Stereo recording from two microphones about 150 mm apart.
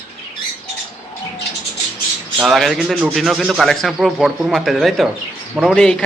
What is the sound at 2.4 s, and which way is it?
A man's voice, centre (ahead or behind).